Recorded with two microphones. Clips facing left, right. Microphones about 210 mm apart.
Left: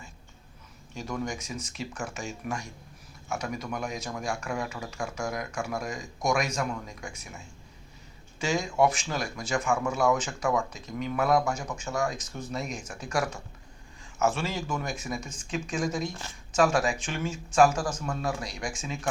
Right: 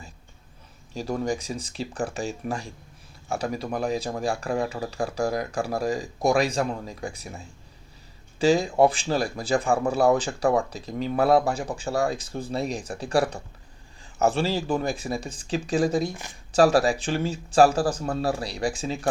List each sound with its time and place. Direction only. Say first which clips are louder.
0.9 s speech: right 6 dB; 35° right (ahead or behind)